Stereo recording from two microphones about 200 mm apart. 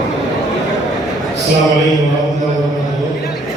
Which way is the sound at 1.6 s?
Centre (ahead or behind).